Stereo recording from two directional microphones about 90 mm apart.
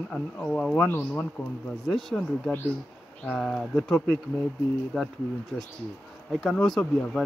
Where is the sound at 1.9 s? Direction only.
5° left (ahead or behind).